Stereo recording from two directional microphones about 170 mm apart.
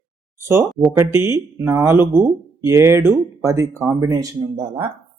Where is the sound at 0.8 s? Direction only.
15° right (ahead or behind).